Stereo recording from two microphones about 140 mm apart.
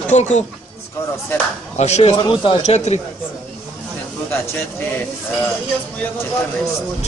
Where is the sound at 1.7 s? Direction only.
50° left (ahead or behind).